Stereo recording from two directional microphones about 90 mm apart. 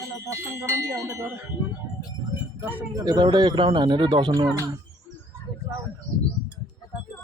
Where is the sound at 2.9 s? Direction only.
45° right (ahead or behind).